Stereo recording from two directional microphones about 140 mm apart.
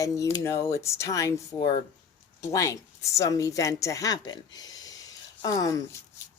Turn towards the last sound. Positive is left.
turn(degrees=25)  # may be behind; listen again after turning